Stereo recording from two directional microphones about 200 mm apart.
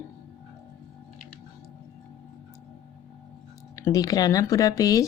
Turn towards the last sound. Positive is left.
turn(degrees=15)  # may be behind; listen again after turning